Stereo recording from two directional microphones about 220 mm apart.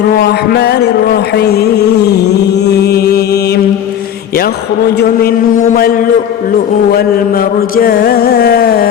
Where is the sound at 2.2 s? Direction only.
50° left (ahead or behind).